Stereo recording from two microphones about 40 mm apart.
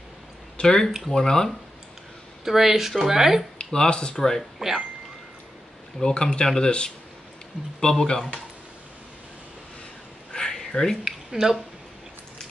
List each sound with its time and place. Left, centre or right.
0.6 s speech: left
2.4 s speech: centre
3.5 s speech: left
4.4 s speech: centre
5.9 s speech: centre
7.8 s speech: centre
10.3 s a sound: centre
11.1 s speech: centre